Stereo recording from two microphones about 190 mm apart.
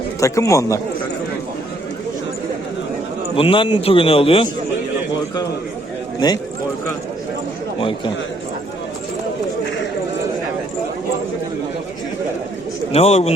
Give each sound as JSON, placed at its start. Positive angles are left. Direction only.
{"t": 0.2, "sound": "a man's voice", "side_deg": 15}
{"t": 3.3, "sound": "a man's voice", "side_deg": 30}
{"t": 6.1, "sound": "a man's voice", "side_deg": 20}
{"t": 7.8, "sound": "a man's voice", "side_deg": 25}
{"t": 12.9, "sound": "a man's voice", "side_deg": 30}